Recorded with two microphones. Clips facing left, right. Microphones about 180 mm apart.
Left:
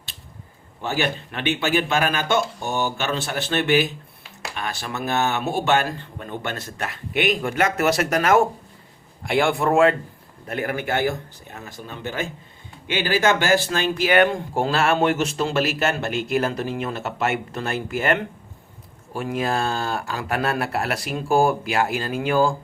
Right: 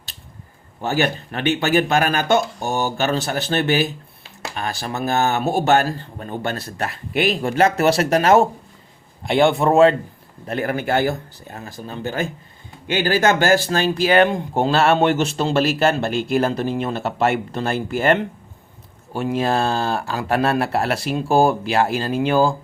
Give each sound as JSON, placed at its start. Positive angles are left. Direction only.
{"t": 0.8, "sound": "speech", "side_deg": -45}
{"t": 14.3, "sound": "speech", "side_deg": -20}